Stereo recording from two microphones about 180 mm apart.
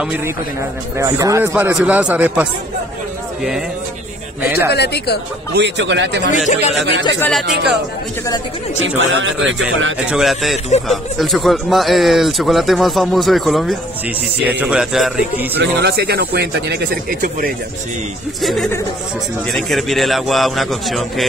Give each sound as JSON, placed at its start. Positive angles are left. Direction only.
{"t": 0.0, "sound": "a man's voice", "side_deg": -5}
{"t": 4.4, "sound": "speech", "side_deg": 60}
{"t": 5.5, "sound": "a man's voice", "side_deg": -75}
{"t": 6.4, "sound": "speech", "side_deg": 40}
{"t": 7.2, "sound": "speech", "side_deg": 5}
{"t": 8.7, "sound": "a man's voice", "side_deg": -90}
{"t": 10.0, "sound": "speech", "side_deg": 0}
{"t": 15.5, "sound": "speech", "side_deg": -65}
{"t": 18.4, "sound": "speech", "side_deg": 0}